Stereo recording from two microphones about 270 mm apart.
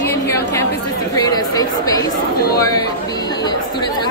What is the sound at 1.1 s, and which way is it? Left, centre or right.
Chatter, centre.